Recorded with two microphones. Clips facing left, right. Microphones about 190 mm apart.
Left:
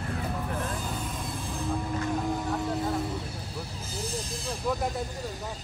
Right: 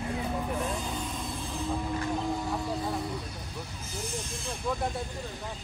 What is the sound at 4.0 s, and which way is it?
Snake, 35° left (ahead or behind).